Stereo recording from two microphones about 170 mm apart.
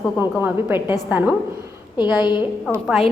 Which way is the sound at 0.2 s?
10° right (ahead or behind).